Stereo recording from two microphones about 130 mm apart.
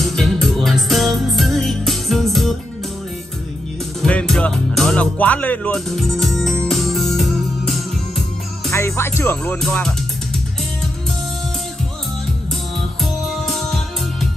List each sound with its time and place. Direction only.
0.0 s music: centre (ahead or behind)
4.0 s music: 5° left (ahead or behind)
8.7 s music: 20° left (ahead or behind)
9.6 s music: 5° left (ahead or behind)
13.0 s music: centre (ahead or behind)